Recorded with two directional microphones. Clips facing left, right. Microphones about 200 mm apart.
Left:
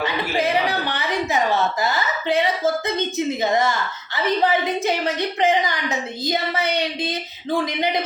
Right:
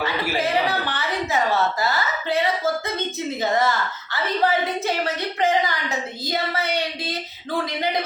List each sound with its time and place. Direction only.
0.0 s a woman's voice: 15° left (ahead or behind)
1.8 s child singing: 20° left (ahead or behind)
3.4 s a woman's voice: 15° left (ahead or behind)
6.2 s child singing: 20° left (ahead or behind)